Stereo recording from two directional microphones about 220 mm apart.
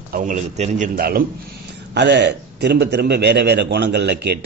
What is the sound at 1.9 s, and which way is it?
A man's voice, 55° right (ahead or behind).